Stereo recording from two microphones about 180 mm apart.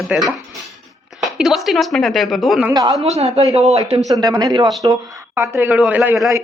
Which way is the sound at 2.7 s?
20° right (ahead or behind).